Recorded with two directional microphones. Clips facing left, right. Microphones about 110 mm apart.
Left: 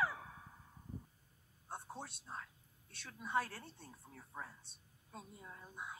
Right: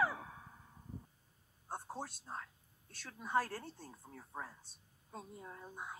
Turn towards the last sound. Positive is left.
turn(degrees=-25)  # may be behind; listen again after turning